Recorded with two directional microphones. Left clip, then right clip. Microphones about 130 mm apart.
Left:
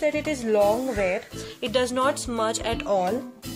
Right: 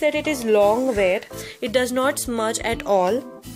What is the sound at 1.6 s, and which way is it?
Speech, 50° right (ahead or behind).